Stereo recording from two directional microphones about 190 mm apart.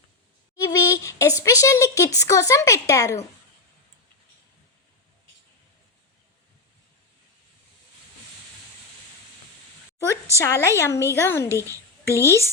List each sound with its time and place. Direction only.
0.5 s a woman's voice: 20° left (ahead or behind)
10.3 s a woman's voice: 15° left (ahead or behind)
11.4 s a child's voice: 15° right (ahead or behind)
12.0 s a woman's voice: 15° left (ahead or behind)